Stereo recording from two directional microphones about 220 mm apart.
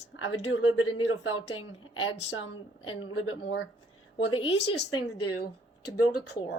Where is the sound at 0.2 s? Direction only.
85° left; by 3.6 s 60° left (ahead or behind).